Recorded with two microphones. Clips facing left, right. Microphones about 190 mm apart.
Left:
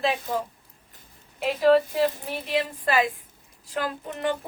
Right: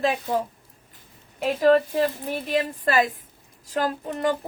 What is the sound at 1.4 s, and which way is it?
A woman's voice, 45° right (ahead or behind).